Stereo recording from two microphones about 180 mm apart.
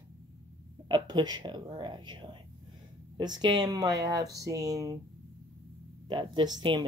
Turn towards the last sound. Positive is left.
turn(degrees=-25)  # may be behind; listen again after turning